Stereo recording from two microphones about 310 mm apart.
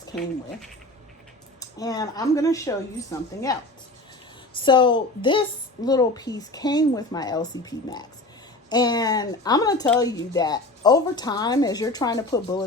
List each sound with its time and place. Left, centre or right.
1.5 s speech: centre